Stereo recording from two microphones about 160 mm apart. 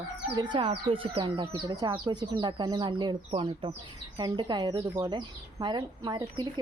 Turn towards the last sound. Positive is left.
turn(degrees=-25)  # may be behind; listen again after turning